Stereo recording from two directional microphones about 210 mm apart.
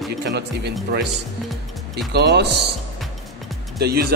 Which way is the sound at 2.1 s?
50° right (ahead or behind).